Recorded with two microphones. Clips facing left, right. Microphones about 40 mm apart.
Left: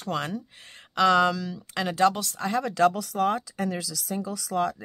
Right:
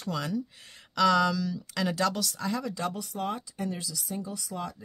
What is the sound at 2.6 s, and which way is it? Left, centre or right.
Speech, left.